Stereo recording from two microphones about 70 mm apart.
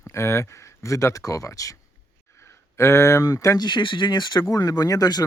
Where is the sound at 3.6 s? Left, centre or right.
Left.